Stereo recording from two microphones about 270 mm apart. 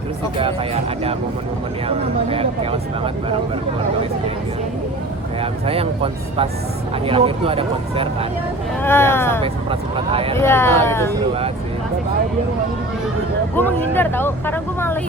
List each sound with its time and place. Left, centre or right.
0.4 s speech: right
5.4 s speech: right
8.8 s speech: centre
9.4 s speech: centre
10.3 s speech: centre
11.1 s speech: right
13.6 s speech: centre